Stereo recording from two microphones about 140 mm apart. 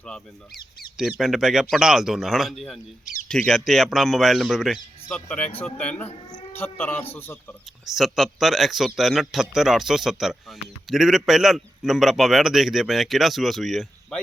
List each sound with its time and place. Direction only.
0.0 s speech: 5° left (ahead or behind)
5.0 s speech: 10° left (ahead or behind)
6.1 s speech: 45° left (ahead or behind)
6.6 s speech: 15° left (ahead or behind)
7.0 s a man's voice: 45° left (ahead or behind)
7.9 s speech: centre (ahead or behind)